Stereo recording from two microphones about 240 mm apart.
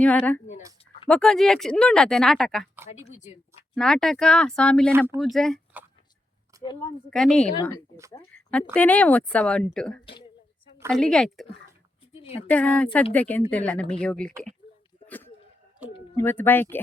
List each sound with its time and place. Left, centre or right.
0.0 s speech: centre
4.9 s speech: centre
5.2 s speech: centre
6.6 s speech: centre
7.1 s speech: centre
12.5 s speech: centre
15.0 s a sound: centre
16.1 s speech: centre